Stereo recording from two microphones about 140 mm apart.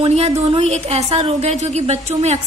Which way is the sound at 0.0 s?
45° right (ahead or behind).